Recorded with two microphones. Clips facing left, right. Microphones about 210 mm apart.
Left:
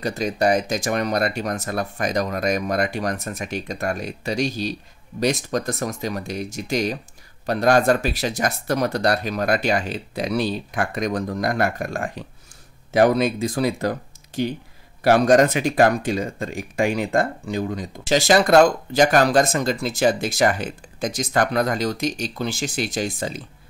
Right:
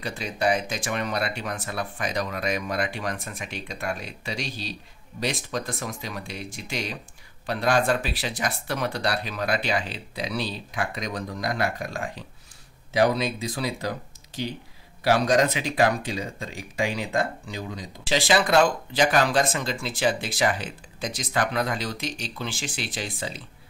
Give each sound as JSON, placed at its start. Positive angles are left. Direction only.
{"t": 0.0, "sound": "speech", "side_deg": 40}